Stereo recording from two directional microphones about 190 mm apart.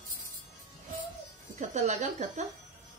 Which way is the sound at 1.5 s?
40° right (ahead or behind).